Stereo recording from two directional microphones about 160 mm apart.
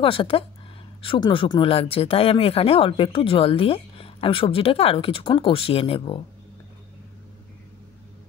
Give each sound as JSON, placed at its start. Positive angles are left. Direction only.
{"t": 0.0, "sound": "speech", "side_deg": 35}